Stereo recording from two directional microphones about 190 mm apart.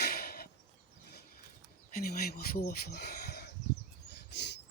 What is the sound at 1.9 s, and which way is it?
Speech, 50° left (ahead or behind).